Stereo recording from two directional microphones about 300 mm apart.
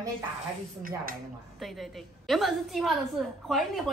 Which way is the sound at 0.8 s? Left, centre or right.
Right.